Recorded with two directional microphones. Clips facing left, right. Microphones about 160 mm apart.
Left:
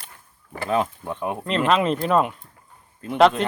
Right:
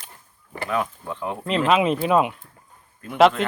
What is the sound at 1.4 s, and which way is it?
Speech, 5° right (ahead or behind).